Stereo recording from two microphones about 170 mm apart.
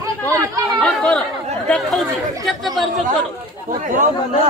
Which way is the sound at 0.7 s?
5° left (ahead or behind).